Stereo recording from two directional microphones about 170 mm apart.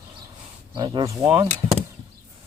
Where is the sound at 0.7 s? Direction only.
25° right (ahead or behind).